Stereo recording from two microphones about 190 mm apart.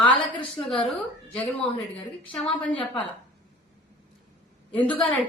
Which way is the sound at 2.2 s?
5° left (ahead or behind).